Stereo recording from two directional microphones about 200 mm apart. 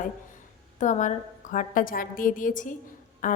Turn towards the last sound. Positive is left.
turn(degrees=40)  # may be behind; listen again after turning